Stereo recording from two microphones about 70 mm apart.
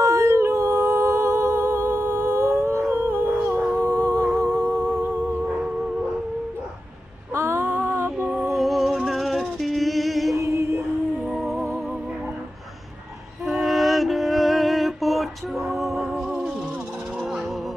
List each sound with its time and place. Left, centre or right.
0.0 s a capella: right
7.3 s a sound: right
7.7 s music: right
8.5 s music: centre
10.3 s music: right
11.2 s music: centre
13.5 s music: centre